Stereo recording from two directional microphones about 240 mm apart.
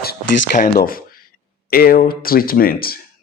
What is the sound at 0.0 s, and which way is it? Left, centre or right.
Speech, left.